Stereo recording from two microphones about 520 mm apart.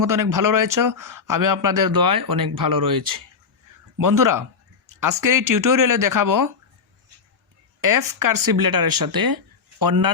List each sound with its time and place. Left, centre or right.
0.0 s a man's voice: right
7.8 s speech: right